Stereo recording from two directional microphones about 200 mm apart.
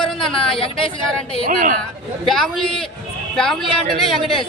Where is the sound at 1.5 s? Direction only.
40° right (ahead or behind).